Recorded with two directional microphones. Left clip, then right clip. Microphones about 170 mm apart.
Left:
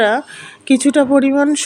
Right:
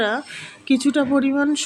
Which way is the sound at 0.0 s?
35° left (ahead or behind).